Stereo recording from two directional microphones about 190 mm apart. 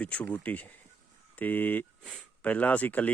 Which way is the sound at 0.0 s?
5° left (ahead or behind).